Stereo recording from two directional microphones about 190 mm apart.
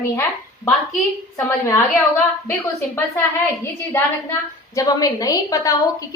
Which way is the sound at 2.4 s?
15° left (ahead or behind).